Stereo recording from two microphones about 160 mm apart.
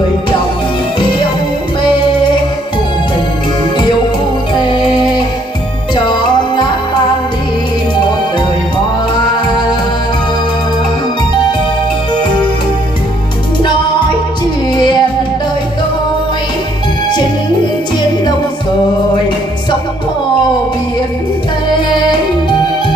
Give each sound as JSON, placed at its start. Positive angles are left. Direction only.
{"t": 4.6, "sound": "music", "side_deg": 30}
{"t": 6.0, "sound": "music", "side_deg": 25}
{"t": 14.7, "sound": "music", "side_deg": 25}